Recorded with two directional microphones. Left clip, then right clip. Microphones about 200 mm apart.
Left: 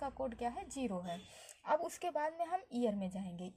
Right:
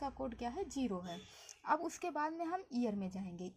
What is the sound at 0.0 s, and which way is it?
A woman's voice, 40° left (ahead or behind).